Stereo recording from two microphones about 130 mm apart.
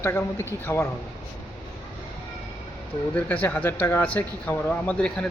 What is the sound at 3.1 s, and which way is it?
Speech, 10° left (ahead or behind).